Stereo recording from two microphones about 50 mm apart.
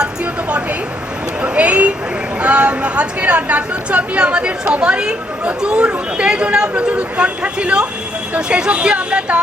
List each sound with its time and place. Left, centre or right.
1.4 s a woman's voice: right